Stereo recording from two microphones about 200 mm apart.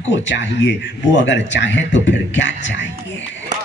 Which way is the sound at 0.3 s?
65° left (ahead or behind).